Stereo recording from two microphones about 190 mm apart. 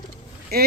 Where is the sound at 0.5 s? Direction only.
55° right (ahead or behind).